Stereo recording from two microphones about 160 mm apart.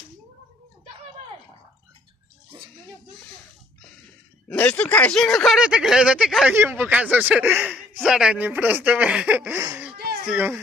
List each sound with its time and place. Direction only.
4.5 s speech: 10° left (ahead or behind); by 9.9 s 15° right (ahead or behind)
9.9 s a sound: 80° right
10.2 s speech: 10° right (ahead or behind)